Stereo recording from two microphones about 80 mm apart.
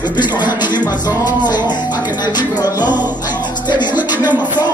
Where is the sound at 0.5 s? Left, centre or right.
Left.